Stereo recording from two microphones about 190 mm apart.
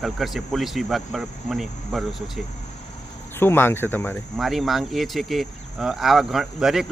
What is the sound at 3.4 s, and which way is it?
Speech, 10° left (ahead or behind).